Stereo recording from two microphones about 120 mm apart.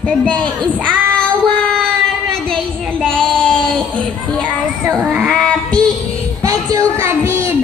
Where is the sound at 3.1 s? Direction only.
10° left (ahead or behind).